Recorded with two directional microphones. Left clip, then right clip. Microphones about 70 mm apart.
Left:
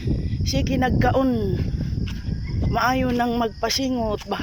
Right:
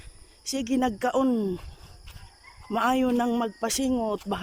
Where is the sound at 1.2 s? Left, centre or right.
Right.